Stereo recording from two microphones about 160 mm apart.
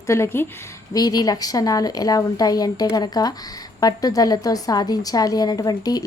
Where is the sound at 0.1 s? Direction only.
15° left (ahead or behind).